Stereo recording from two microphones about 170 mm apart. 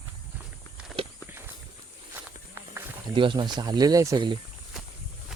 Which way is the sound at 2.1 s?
15° right (ahead or behind).